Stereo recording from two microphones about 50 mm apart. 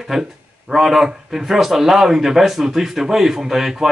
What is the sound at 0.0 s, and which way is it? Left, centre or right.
Speech, centre.